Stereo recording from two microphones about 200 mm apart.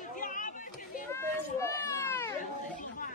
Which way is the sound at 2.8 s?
40° left (ahead or behind).